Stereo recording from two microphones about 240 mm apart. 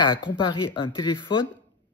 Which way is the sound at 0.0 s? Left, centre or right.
Centre.